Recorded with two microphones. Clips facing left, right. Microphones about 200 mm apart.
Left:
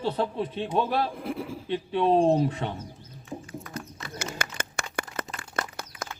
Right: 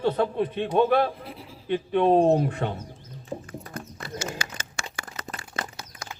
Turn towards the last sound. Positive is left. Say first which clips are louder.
# left 3 dB
turn(degrees=55)  # may be behind; listen again after turning